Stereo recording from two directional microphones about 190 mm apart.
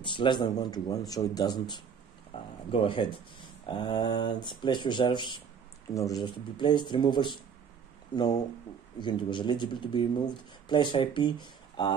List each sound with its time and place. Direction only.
0.0 s speech: 25° left (ahead or behind)
2.3 s a sound: 25° left (ahead or behind)
2.7 s speech: 25° left (ahead or behind)